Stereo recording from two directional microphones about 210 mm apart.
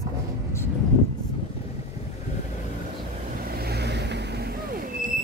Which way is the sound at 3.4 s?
50° right (ahead or behind).